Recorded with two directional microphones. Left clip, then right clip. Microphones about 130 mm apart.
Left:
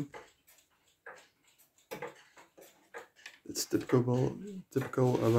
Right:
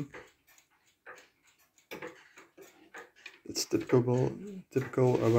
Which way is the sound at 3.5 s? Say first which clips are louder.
Right 2 dB; 15° left (ahead or behind).